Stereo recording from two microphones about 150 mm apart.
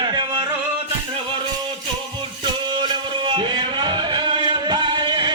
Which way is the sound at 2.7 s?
30° right (ahead or behind).